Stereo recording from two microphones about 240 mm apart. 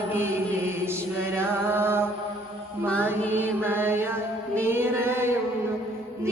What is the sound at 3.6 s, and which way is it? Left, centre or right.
Mantra, centre.